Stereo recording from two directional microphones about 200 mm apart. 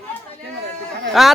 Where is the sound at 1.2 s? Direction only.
Centre (ahead or behind).